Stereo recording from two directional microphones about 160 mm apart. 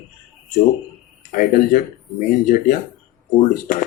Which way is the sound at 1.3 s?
55° left (ahead or behind).